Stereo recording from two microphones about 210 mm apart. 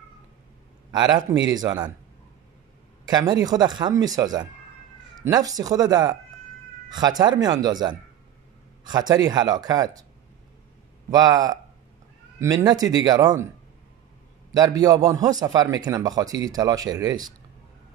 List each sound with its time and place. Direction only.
1.5 s speech: 20° right (ahead or behind)
3.1 s a man's voice: 20° right (ahead or behind)
11.1 s a man's voice: 15° right (ahead or behind)
14.5 s a man's voice: 15° right (ahead or behind)